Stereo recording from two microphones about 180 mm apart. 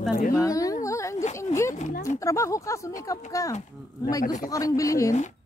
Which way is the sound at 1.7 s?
45° left (ahead or behind).